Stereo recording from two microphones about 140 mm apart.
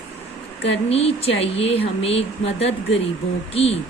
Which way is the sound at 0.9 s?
45° left (ahead or behind).